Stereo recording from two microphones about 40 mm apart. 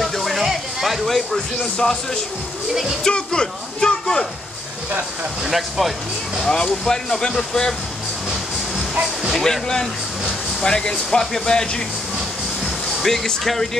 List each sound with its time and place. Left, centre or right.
0.0 s music: centre
1.6 s speech: centre
2.7 s speech: centre
3.1 s a man's voice: left
5.4 s speech: centre
6.8 s speech: centre
9.3 s speech: centre
13.0 s speech: centre